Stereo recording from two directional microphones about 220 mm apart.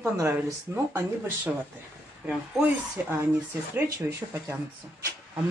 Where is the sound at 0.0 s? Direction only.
10° right (ahead or behind).